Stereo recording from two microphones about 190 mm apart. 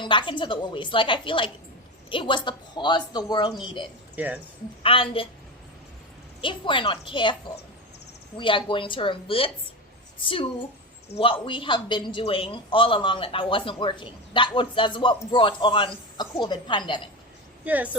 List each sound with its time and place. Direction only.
0.0 s a woman's voice: 25° left (ahead or behind)
4.1 s speech: 10° right (ahead or behind)
4.8 s a woman's voice: 30° left (ahead or behind)
6.4 s a woman's voice: 25° left (ahead or behind)
11.1 s a woman's voice: 30° left (ahead or behind)
17.7 s speech: 10° right (ahead or behind)